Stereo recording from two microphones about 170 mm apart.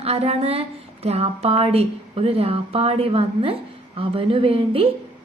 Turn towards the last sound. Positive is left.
turn(degrees=-35)  # may be behind; listen again after turning